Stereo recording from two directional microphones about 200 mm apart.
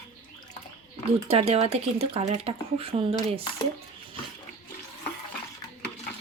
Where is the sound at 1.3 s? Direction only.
30° right (ahead or behind).